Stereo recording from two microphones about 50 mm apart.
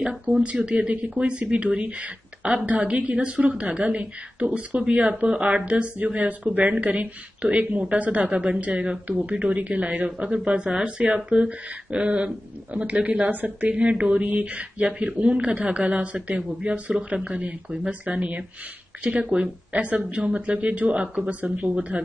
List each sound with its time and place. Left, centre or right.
0.3 s a woman's voice: right